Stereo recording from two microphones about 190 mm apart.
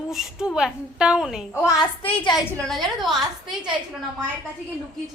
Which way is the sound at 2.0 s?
30° left (ahead or behind).